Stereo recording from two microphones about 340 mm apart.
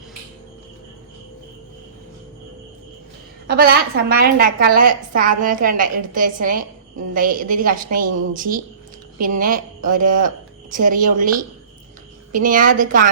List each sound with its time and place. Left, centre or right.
3.4 s a woman's voice: right
12.3 s a woman's voice: right